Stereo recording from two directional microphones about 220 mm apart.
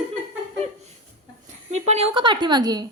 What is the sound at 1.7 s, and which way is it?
A woman's voice, 30° right (ahead or behind).